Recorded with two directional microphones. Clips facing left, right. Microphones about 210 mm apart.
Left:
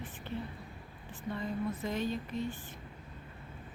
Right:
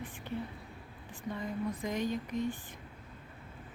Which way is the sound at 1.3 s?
15° right (ahead or behind).